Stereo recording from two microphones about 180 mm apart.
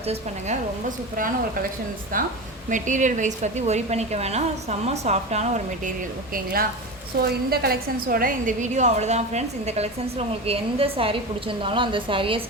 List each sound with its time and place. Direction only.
0.1 s a woman's voice: 45° right (ahead or behind)
6.3 s a woman's voice: 55° right (ahead or behind); by 12.4 s 30° right (ahead or behind)